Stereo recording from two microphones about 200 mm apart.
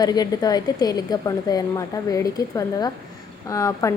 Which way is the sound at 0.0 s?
20° left (ahead or behind).